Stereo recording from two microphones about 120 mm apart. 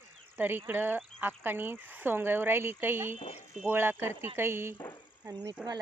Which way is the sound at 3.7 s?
20° right (ahead or behind).